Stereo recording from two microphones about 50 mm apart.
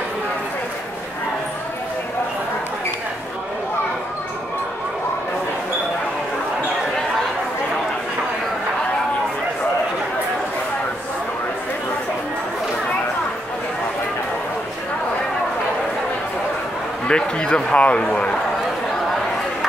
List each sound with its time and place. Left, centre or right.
17.1 s a man's voice: left